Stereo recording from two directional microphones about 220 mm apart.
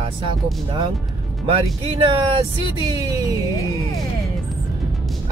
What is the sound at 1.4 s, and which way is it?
Speech, 25° right (ahead or behind).